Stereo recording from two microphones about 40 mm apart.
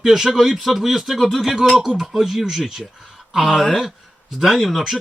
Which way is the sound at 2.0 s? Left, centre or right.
Centre.